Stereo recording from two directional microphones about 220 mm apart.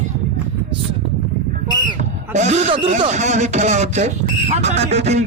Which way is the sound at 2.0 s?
30° right (ahead or behind).